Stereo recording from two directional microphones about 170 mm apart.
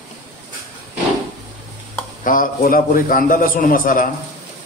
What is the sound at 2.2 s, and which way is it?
A man's voice, 55° left (ahead or behind).